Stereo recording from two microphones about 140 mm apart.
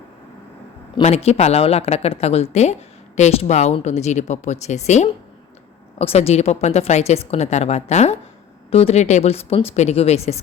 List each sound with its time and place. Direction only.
1.0 s a woman's voice: 50° left (ahead or behind)